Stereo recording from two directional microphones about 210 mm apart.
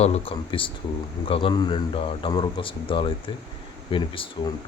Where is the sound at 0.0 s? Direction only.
30° left (ahead or behind).